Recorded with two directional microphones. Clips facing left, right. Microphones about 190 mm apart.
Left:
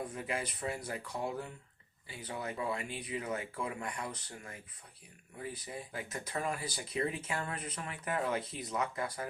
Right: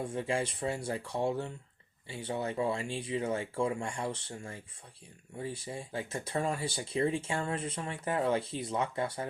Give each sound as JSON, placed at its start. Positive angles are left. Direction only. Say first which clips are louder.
{"t": 0.0, "sound": "speech", "louder": "right 5 dB", "side_deg": -30}